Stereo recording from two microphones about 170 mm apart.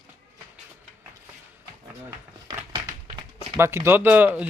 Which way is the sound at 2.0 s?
20° right (ahead or behind).